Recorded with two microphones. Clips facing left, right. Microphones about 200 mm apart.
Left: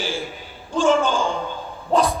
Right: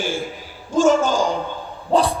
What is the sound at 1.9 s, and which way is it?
Dog, 30° right (ahead or behind).